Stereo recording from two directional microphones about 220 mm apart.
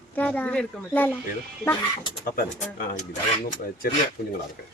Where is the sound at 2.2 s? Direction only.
40° left (ahead or behind).